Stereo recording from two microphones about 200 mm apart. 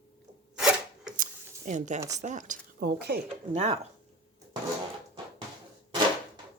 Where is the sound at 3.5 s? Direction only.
35° right (ahead or behind).